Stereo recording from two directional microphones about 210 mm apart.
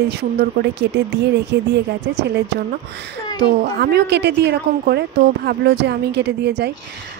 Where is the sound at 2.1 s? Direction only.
50° right (ahead or behind).